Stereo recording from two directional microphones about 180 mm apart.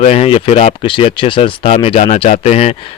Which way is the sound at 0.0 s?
35° left (ahead or behind).